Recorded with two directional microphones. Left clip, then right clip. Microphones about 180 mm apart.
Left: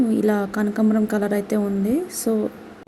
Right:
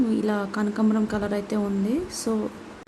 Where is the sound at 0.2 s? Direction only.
20° left (ahead or behind).